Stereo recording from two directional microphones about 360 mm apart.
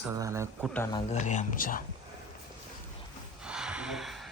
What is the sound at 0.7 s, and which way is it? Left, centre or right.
Speech, centre.